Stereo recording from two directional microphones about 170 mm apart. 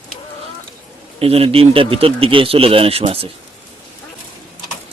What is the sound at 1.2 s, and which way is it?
A man's voice, 35° right (ahead or behind).